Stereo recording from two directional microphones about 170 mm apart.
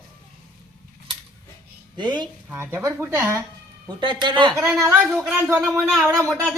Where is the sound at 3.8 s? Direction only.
30° right (ahead or behind).